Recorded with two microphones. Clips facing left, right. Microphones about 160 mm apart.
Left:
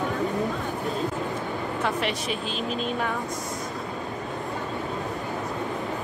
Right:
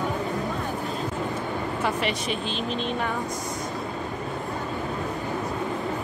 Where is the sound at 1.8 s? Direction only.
Centre (ahead or behind).